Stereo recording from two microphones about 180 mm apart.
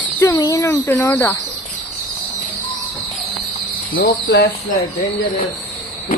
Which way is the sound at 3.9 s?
65° left (ahead or behind).